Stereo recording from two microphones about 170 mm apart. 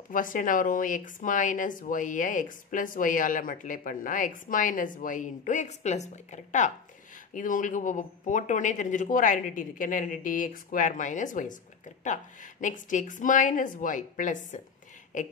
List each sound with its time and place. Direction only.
0.1 s speech: 50° left (ahead or behind)